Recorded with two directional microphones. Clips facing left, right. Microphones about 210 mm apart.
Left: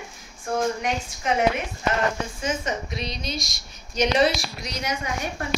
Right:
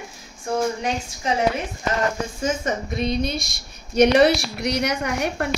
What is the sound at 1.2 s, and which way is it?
Speech, 30° right (ahead or behind).